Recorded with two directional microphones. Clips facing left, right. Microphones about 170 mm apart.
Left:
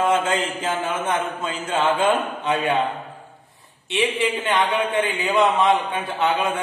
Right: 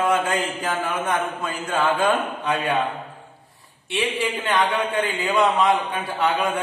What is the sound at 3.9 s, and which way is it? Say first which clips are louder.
A man's voice: left 2 dB; 20° left (ahead or behind).